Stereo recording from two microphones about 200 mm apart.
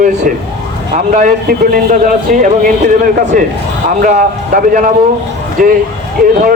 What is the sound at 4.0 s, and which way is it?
A man's voice, 40° right (ahead or behind).